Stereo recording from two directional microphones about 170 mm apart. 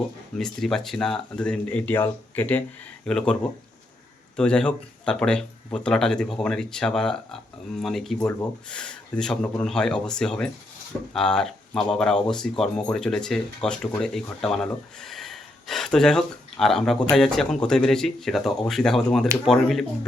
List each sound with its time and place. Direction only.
0.3 s speech: centre (ahead or behind)
4.4 s speech: 5° left (ahead or behind)